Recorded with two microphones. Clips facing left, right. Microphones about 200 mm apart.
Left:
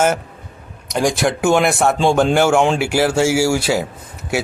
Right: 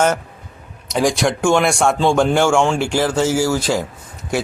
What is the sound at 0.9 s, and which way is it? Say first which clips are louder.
A man's voice: even; centre (ahead or behind).